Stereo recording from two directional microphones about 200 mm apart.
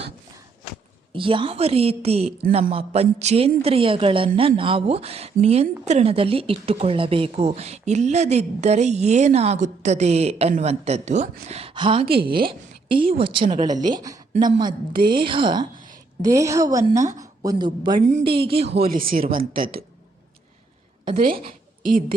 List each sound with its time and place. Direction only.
1.1 s a woman's voice: 25° right (ahead or behind)
18.8 s speech: 45° right (ahead or behind)
21.1 s speech: 45° right (ahead or behind)